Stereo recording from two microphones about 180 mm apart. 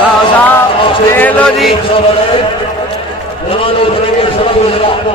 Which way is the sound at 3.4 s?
30° left (ahead or behind).